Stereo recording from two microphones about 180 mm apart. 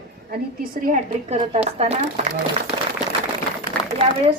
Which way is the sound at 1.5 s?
35° right (ahead or behind).